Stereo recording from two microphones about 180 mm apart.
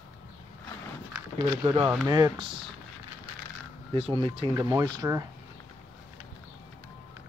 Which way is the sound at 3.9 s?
30° right (ahead or behind).